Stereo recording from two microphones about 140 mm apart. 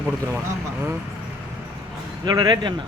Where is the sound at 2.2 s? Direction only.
30° right (ahead or behind).